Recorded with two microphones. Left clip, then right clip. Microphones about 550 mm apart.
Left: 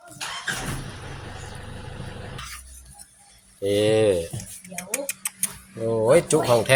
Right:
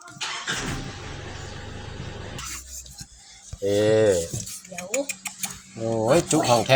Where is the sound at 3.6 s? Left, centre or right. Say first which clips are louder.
Even; left.